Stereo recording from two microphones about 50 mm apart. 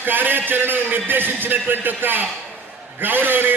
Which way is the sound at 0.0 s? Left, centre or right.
Right.